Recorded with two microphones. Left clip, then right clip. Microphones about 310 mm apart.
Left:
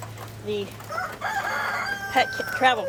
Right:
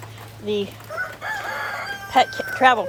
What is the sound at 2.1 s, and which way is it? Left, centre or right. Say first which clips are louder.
Speech: right 5 dB; centre.